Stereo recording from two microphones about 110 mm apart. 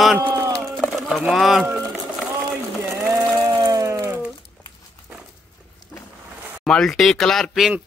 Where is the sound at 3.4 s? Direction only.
35° right (ahead or behind).